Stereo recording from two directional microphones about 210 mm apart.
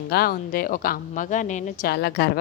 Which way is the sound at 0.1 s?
45° left (ahead or behind).